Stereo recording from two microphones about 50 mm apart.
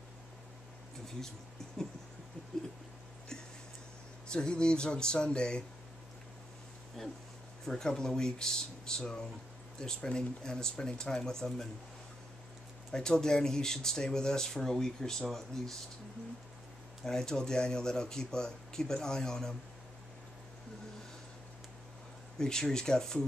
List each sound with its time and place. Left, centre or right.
4.3 s speech: centre
7.6 s speech: centre
12.9 s speech: centre
17.0 s speech: centre
22.4 s speech: centre